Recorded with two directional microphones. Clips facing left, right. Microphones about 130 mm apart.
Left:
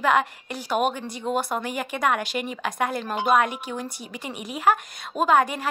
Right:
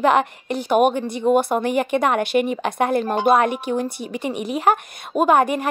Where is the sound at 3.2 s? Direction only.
35° right (ahead or behind).